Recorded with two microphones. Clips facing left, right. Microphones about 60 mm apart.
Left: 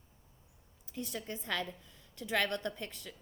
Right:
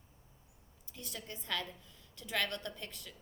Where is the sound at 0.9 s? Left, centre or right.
Left.